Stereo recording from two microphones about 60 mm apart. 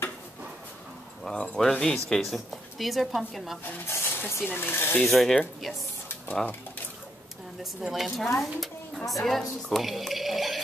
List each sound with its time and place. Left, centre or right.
1.2 s a woman's voice: centre
3.7 s speech: left
5.0 s a woman's voice: centre
7.8 s a woman's voice: centre